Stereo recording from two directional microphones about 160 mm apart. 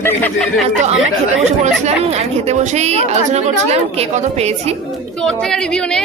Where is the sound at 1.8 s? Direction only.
40° right (ahead or behind).